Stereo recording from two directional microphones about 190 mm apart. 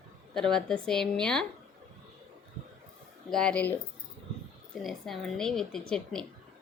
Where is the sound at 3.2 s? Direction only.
5° left (ahead or behind).